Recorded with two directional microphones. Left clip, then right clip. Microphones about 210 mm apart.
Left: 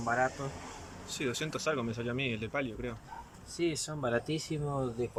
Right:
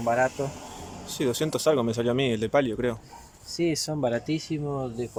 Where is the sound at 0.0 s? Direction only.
35° right (ahead or behind).